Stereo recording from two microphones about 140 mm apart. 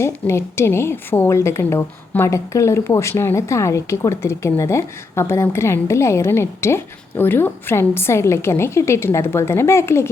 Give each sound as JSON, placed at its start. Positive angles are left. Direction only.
{"t": 0.0, "sound": "a woman's voice", "side_deg": 20}